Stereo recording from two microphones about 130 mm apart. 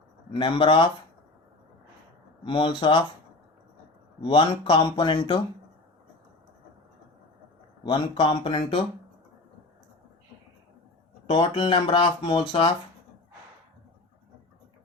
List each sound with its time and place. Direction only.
0.3 s speech: 40° left (ahead or behind)
2.4 s speech: 40° left (ahead or behind)
4.2 s speech: 40° left (ahead or behind)
7.9 s speech: 35° left (ahead or behind)
11.3 s speech: 40° left (ahead or behind)